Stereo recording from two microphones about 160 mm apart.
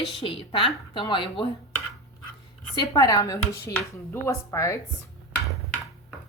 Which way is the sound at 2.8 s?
20° left (ahead or behind).